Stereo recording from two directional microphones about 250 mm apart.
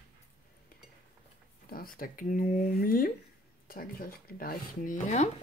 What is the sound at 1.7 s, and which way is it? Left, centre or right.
Speech, left.